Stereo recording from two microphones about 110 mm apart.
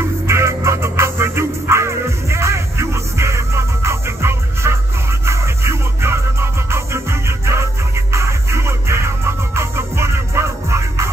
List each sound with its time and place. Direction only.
0.3 s music: 25° right (ahead or behind)